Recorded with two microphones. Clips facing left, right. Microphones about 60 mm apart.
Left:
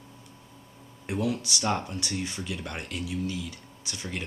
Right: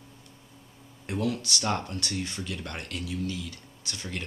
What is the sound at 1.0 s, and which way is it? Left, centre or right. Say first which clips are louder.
Speech: left 1 dB; centre.